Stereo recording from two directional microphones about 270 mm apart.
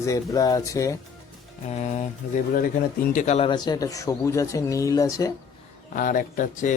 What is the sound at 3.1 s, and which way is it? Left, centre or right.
Speech, left.